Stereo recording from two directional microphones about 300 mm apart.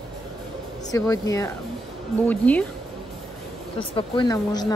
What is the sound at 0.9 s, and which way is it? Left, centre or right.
Speech, centre.